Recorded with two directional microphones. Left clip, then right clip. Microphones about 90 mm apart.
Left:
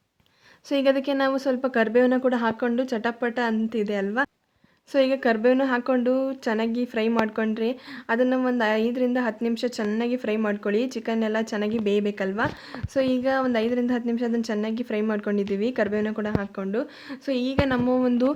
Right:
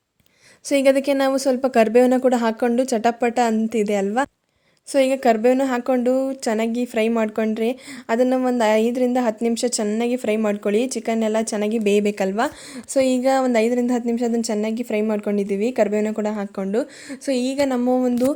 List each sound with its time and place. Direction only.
0.7 s a woman's voice: 40° right (ahead or behind)
4.9 s a woman's voice: 25° right (ahead or behind)
9.8 s a woman's voice: 25° right (ahead or behind)
11.9 s a woman's voice: 40° right (ahead or behind)
16.6 s a woman's voice: 60° right (ahead or behind)
17.8 s a woman's voice: 30° right (ahead or behind)